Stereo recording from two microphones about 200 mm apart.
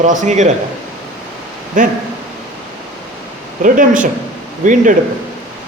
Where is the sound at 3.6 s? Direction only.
40° right (ahead or behind).